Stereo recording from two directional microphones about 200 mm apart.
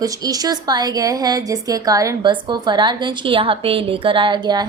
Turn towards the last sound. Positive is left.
turn(degrees=-20)  # may be behind; listen again after turning